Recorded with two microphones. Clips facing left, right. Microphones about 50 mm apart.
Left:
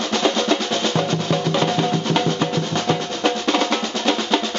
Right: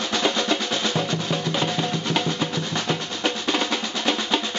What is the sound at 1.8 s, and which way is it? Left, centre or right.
Music, left.